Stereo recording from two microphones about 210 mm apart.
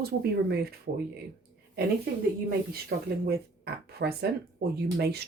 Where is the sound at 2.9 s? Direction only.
50° right (ahead or behind).